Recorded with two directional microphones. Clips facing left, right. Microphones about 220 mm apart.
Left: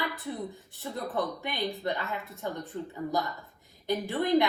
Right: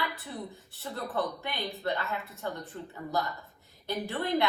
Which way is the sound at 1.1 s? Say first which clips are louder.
Even; 15° left (ahead or behind).